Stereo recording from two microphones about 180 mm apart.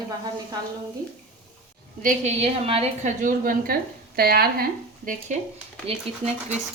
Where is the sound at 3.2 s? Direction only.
50° right (ahead or behind).